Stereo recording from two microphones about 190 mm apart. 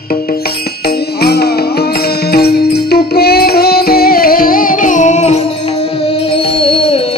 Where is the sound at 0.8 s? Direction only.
55° left (ahead or behind).